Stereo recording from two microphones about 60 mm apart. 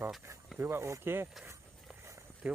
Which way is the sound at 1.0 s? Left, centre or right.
Right.